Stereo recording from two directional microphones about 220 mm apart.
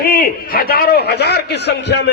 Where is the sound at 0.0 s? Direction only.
40° left (ahead or behind).